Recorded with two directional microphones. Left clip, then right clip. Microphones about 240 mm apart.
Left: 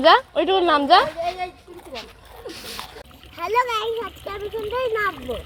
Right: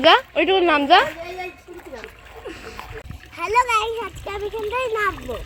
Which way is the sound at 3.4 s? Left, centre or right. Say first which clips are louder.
Right 3 dB; centre.